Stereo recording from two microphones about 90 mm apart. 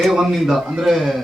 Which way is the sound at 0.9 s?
Centre (ahead or behind).